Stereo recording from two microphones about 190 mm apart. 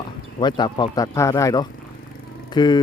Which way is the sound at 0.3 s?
25° left (ahead or behind).